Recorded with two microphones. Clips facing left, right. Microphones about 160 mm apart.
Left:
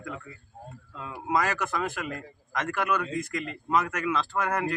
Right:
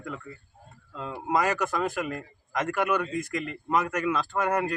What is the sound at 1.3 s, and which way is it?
A man's voice, 15° right (ahead or behind).